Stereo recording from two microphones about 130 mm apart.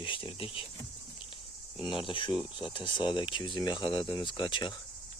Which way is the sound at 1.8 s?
40° left (ahead or behind).